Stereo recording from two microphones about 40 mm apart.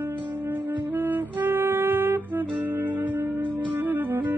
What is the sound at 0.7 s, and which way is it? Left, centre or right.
Music, right.